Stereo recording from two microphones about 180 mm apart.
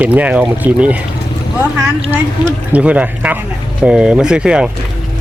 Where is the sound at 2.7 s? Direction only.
5° right (ahead or behind).